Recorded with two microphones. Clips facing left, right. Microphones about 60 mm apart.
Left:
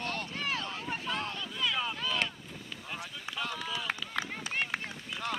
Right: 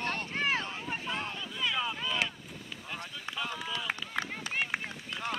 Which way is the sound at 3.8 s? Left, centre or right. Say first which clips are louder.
Right 1 dB; centre.